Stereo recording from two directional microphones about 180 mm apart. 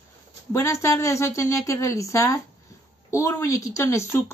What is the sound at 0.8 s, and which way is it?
A woman's voice, 15° left (ahead or behind).